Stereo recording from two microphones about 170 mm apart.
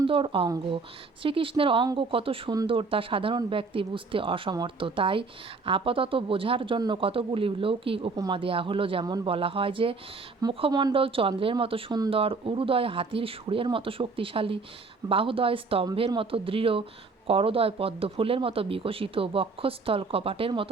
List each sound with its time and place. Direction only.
0.1 s speech: 30° right (ahead or behind)
8.1 s speech: 20° right (ahead or behind)
8.4 s speech: 30° right (ahead or behind)